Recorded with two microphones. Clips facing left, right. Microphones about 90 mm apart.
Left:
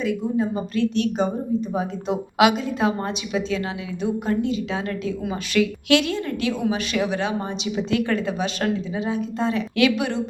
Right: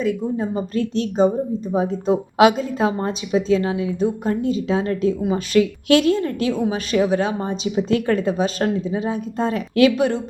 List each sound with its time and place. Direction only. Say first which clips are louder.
0.0 s a woman's voice: right 1 dB; 40° right (ahead or behind)